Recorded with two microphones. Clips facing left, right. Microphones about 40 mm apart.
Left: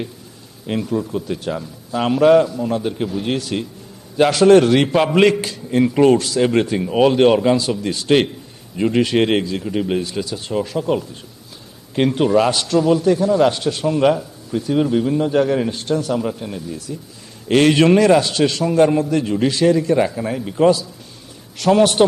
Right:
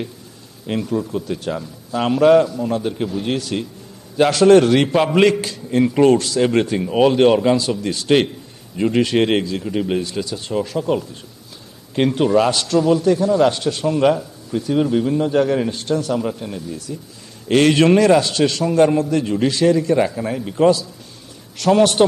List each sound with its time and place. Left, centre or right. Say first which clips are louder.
0.7 s a man's voice: even; centre